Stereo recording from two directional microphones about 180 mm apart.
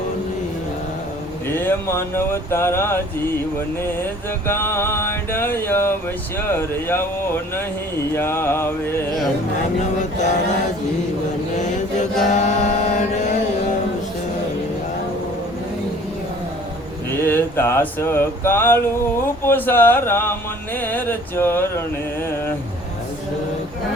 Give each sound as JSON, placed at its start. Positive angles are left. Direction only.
{"t": 1.5, "sound": "mantra", "side_deg": 10}
{"t": 4.4, "sound": "mantra", "side_deg": 15}
{"t": 11.5, "sound": "chant", "side_deg": 40}
{"t": 17.2, "sound": "mantra", "side_deg": 10}
{"t": 20.7, "sound": "a sound", "side_deg": 10}